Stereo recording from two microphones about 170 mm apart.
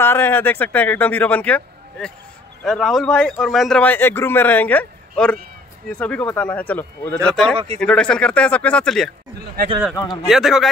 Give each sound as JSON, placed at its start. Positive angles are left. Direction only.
{"t": 0.0, "sound": "a man's voice", "side_deg": 10}
{"t": 7.5, "sound": "speech", "side_deg": -35}
{"t": 7.8, "sound": "a man's voice", "side_deg": 5}
{"t": 10.2, "sound": "a man's voice", "side_deg": 0}